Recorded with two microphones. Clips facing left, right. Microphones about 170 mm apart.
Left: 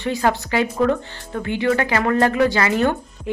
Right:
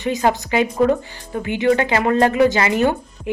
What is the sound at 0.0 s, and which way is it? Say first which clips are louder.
Speech: right 1 dB; 20° right (ahead or behind).